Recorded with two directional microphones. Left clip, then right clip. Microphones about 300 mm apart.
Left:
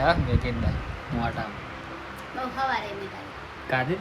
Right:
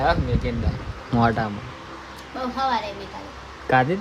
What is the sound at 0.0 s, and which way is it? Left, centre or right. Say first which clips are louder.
Speech: right 2 dB; centre.